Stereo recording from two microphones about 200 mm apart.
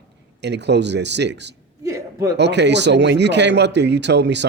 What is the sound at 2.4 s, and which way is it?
Speech, 60° right (ahead or behind).